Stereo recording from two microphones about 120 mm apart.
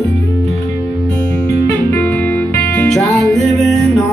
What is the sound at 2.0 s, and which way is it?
Music, 15° left (ahead or behind).